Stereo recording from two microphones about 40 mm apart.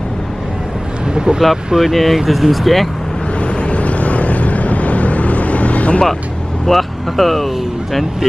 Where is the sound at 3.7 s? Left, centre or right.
Left.